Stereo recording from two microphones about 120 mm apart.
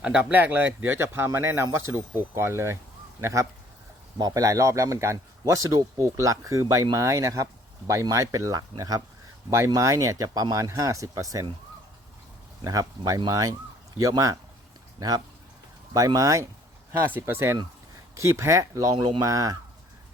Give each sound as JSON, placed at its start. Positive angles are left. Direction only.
{"t": 0.0, "sound": "speech", "side_deg": -10}
{"t": 12.6, "sound": "speech", "side_deg": -30}
{"t": 14.9, "sound": "speech", "side_deg": -30}